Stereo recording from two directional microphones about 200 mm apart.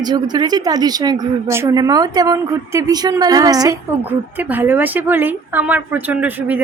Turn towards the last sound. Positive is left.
turn(degrees=-10)  # may be behind; listen again after turning